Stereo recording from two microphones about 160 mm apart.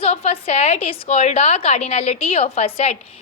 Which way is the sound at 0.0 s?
40° left (ahead or behind).